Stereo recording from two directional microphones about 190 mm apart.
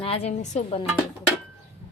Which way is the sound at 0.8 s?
5° right (ahead or behind).